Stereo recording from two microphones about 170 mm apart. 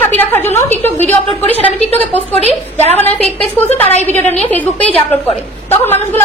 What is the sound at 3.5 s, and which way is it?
A woman's voice, 10° left (ahead or behind).